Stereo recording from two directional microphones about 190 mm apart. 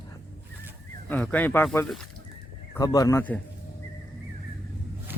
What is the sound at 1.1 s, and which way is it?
A man's voice, 10° left (ahead or behind).